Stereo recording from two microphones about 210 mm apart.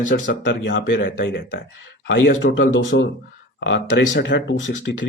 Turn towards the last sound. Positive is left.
turn(degrees=60)  # may be behind; listen again after turning